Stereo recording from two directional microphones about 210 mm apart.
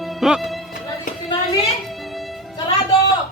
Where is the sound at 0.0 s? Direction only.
Centre (ahead or behind).